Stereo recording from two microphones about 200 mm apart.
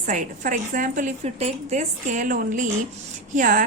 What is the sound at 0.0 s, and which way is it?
A woman's voice, 40° right (ahead or behind).